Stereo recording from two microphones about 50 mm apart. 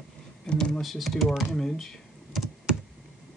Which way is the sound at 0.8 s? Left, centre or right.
Centre.